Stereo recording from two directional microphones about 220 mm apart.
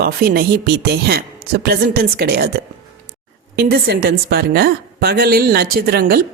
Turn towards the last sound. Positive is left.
turn(degrees=-45)  # may be behind; listen again after turning